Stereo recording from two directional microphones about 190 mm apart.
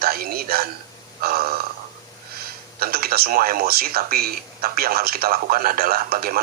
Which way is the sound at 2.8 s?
50° right (ahead or behind).